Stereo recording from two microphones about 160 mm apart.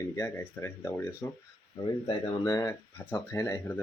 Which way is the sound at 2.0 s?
25° left (ahead or behind).